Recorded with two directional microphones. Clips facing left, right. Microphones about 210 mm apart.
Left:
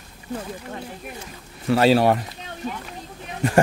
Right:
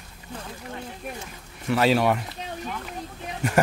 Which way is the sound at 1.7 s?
35° left (ahead or behind).